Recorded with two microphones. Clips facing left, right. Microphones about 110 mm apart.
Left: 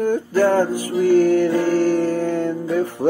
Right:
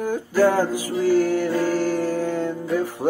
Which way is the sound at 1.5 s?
15° left (ahead or behind).